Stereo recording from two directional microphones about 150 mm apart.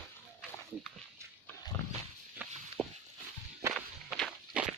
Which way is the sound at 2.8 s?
5° left (ahead or behind).